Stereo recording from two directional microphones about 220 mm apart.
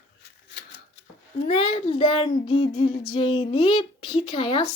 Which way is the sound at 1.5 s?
25° left (ahead or behind).